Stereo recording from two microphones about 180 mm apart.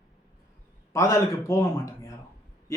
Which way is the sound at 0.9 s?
15° left (ahead or behind).